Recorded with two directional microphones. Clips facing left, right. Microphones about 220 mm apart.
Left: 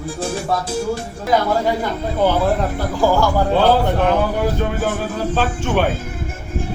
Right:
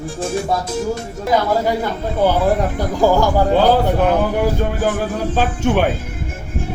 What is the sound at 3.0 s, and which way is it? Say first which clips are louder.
Speech: right 2 dB; 15° right (ahead or behind).